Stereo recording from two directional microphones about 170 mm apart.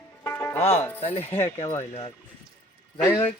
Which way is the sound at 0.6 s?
35° left (ahead or behind).